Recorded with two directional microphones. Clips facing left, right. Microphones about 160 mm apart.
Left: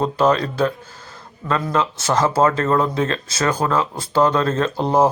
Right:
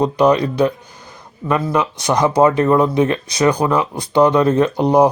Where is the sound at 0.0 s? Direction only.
15° right (ahead or behind).